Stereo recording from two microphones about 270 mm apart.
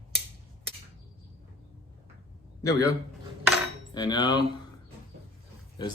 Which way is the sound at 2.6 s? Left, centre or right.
Centre.